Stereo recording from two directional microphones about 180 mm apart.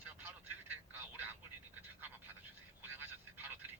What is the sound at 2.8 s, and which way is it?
Telephone, 10° right (ahead or behind).